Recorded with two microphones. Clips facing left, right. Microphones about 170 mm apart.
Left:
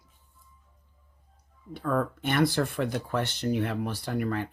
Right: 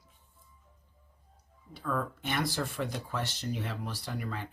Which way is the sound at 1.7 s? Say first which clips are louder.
Left 6 dB; 55° left (ahead or behind).